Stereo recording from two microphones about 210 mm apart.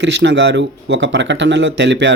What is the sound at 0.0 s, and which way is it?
Speech, 55° right (ahead or behind).